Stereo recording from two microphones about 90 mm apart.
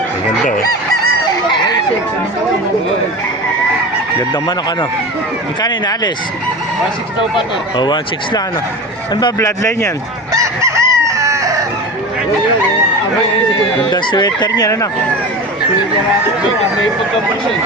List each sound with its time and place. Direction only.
5.6 s speech: 50° left (ahead or behind)
7.3 s speech: 60° left (ahead or behind)
9.4 s speech: 35° left (ahead or behind)
10.3 s chicken: 35° right (ahead or behind)
13.9 s fowl: 55° left (ahead or behind); by 14.8 s 40° left (ahead or behind)